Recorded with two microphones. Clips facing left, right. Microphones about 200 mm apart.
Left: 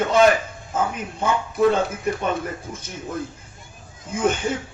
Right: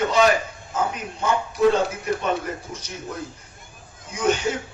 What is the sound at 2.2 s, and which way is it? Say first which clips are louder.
Speech: even; 50° left (ahead or behind).